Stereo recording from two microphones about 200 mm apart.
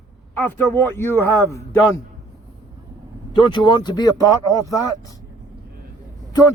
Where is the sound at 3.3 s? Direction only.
25° left (ahead or behind).